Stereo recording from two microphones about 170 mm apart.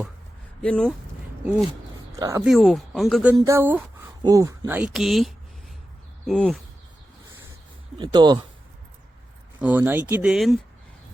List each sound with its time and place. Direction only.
0.6 s speech: 5° left (ahead or behind)
2.1 s speech: 20° right (ahead or behind)
2.4 s speech: centre (ahead or behind)
3.3 s speech: 20° right (ahead or behind); by 6.6 s centre (ahead or behind)
7.9 s speech: 25° right (ahead or behind)
9.6 s speech: 10° right (ahead or behind)